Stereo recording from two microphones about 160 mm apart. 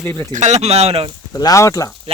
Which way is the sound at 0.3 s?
45° right (ahead or behind).